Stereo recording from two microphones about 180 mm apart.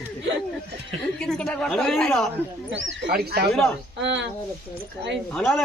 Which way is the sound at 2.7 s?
85° right.